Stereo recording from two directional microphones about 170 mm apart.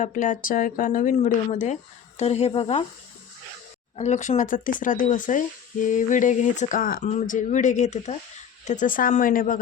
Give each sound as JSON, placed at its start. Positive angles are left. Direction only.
{"t": 0.0, "sound": "speech", "side_deg": 50}
{"t": 3.9, "sound": "speech", "side_deg": 45}